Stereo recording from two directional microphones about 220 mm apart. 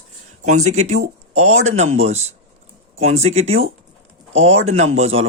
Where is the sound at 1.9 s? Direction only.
30° right (ahead or behind).